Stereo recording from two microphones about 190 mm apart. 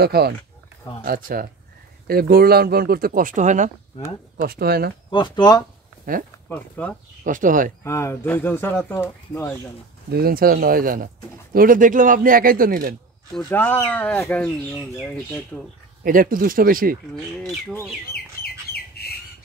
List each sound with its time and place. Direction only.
0.0 s speech: 55° right (ahead or behind); by 3.7 s 40° right (ahead or behind)
4.4 s speech: 55° right (ahead or behind)
5.1 s speech: 25° left (ahead or behind)
6.1 s speech: 45° right (ahead or behind)
6.5 s speech: 5° left (ahead or behind)
7.2 s speech: 45° right (ahead or behind)
7.8 s speech: 15° left (ahead or behind)
10.1 s speech: 50° right (ahead or behind)
13.4 s speech: 10° left (ahead or behind)
16.0 s speech: 45° right (ahead or behind)
17.4 s speech: 5° left (ahead or behind)
18.1 s bird: 55° left (ahead or behind)